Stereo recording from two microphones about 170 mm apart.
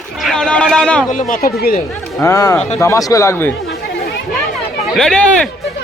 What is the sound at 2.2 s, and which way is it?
A man's voice, 20° left (ahead or behind).